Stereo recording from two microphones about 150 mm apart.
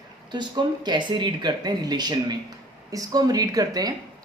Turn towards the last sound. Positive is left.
turn(degrees=-25)  # may be behind; listen again after turning